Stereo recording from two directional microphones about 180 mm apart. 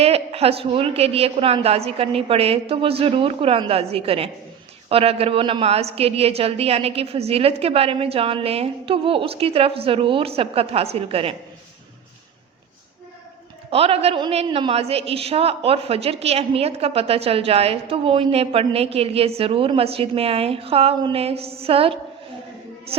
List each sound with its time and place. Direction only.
0.0 s a woman's voice: 35° right (ahead or behind)
13.7 s a woman's voice: 35° right (ahead or behind)
22.9 s music: 30° right (ahead or behind)